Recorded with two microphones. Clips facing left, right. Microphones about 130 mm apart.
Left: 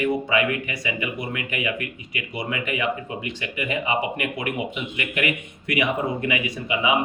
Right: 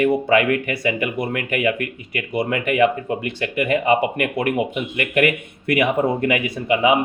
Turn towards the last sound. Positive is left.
turn(degrees=-50)  # may be behind; listen again after turning